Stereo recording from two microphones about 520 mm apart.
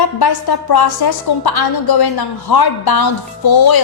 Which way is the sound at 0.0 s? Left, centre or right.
Left.